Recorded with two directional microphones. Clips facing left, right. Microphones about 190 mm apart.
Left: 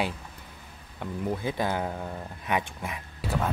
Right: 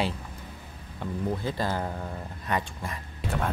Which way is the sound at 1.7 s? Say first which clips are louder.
Left 1 dB; 5° left (ahead or behind).